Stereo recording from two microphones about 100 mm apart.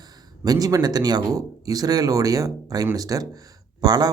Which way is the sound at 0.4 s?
40° right (ahead or behind).